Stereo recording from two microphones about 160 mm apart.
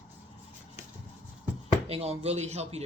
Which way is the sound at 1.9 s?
40° right (ahead or behind).